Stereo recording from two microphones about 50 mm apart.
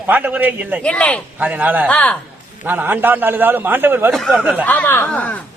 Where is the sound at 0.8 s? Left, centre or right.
Left.